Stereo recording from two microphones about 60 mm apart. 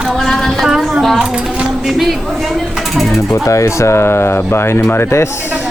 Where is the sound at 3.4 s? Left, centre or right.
Left.